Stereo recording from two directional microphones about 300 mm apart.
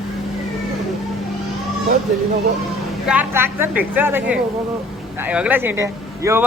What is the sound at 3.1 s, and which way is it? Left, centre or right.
A woman's voice, centre.